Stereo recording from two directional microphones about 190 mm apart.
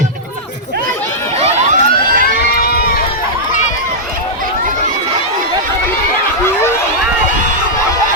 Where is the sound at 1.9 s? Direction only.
50° right (ahead or behind).